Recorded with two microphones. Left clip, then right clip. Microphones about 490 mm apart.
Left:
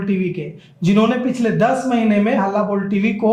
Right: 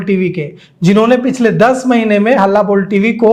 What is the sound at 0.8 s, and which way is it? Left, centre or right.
A man's voice, right.